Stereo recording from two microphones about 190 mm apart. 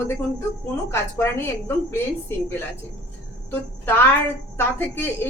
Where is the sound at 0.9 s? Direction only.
15° left (ahead or behind).